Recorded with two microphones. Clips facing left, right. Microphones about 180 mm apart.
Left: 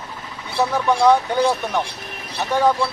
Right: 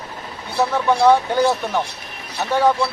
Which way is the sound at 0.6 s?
5° right (ahead or behind).